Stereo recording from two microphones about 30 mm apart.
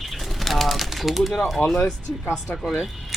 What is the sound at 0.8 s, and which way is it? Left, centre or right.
Speech, centre.